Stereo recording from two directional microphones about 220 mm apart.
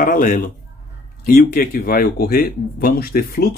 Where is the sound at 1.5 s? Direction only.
40° left (ahead or behind).